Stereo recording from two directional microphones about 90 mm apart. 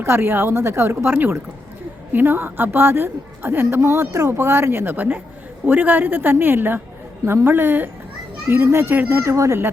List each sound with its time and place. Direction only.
0.0 s a woman's voice: 25° right (ahead or behind)